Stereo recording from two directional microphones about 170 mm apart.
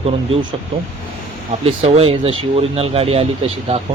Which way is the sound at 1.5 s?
35° right (ahead or behind).